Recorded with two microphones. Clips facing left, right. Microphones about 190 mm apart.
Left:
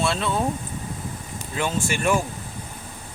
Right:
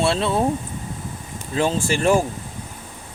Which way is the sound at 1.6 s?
30° right (ahead or behind).